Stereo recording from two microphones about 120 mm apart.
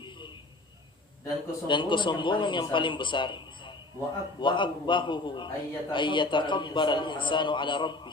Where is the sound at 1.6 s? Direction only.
40° left (ahead or behind).